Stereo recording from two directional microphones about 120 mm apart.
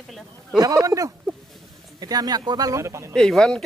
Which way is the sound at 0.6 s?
30° right (ahead or behind).